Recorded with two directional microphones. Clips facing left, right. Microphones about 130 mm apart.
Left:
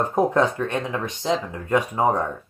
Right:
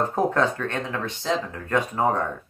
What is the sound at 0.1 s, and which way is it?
Speech, 15° left (ahead or behind).